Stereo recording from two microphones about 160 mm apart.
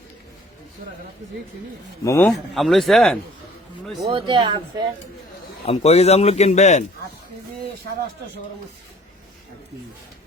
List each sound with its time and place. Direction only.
2.0 s speech: 15° left (ahead or behind)
2.3 s speech: centre (ahead or behind)
4.0 s speech: 30° right (ahead or behind)
5.6 s speech: 40° left (ahead or behind)